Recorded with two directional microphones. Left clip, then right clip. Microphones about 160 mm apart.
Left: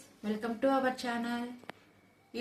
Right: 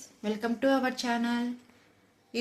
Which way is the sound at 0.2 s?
70° right (ahead or behind).